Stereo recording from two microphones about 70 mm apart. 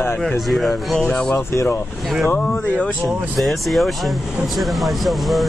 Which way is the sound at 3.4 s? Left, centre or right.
Centre.